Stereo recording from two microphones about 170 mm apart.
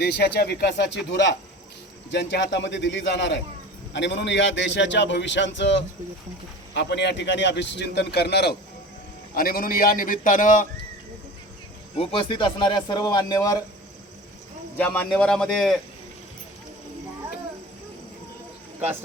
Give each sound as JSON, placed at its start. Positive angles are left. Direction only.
{"t": 0.0, "sound": "a man's voice", "side_deg": 75}
{"t": 6.7, "sound": "a man's voice", "side_deg": 90}
{"t": 9.3, "sound": "a man's voice", "side_deg": 60}
{"t": 11.9, "sound": "speech", "side_deg": 30}
{"t": 14.8, "sound": "a man's voice", "side_deg": 10}